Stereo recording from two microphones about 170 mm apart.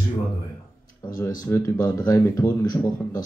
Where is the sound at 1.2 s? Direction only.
20° left (ahead or behind).